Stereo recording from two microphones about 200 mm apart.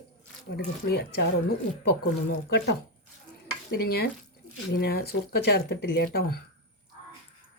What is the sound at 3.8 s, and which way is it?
Speech, 50° left (ahead or behind).